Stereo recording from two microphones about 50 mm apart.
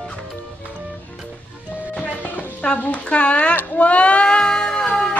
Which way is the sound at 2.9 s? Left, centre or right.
Left.